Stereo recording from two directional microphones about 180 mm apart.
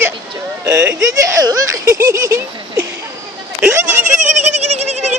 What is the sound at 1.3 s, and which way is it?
Speech, 20° right (ahead or behind).